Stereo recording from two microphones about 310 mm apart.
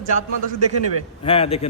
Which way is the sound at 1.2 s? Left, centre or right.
Centre.